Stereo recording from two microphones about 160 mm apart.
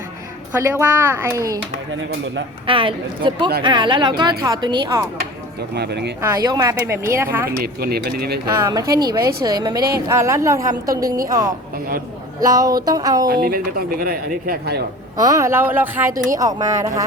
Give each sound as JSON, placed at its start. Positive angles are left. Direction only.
{"t": 0.6, "sound": "speech", "side_deg": -15}
{"t": 2.6, "sound": "speech", "side_deg": -35}
{"t": 5.7, "sound": "speech", "side_deg": -90}
{"t": 6.2, "sound": "speech", "side_deg": -20}
{"t": 7.6, "sound": "speech", "side_deg": -75}
{"t": 8.5, "sound": "speech", "side_deg": -15}
{"t": 13.2, "sound": "speech", "side_deg": -70}
{"t": 15.2, "sound": "speech", "side_deg": -20}